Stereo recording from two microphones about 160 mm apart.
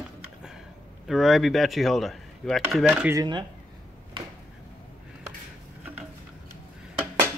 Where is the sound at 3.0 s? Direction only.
25° right (ahead or behind).